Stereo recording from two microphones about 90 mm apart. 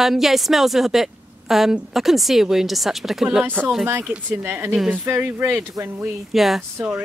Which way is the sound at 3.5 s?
20° right (ahead or behind).